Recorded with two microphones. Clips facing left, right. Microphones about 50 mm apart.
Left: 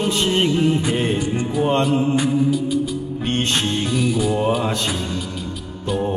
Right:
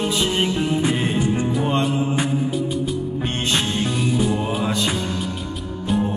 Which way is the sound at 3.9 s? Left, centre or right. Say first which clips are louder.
Left 2 dB; right.